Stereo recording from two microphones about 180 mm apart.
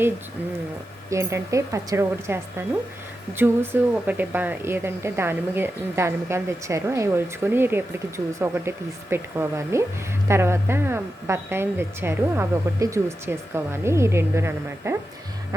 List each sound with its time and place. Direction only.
1.1 s speech: 15° right (ahead or behind)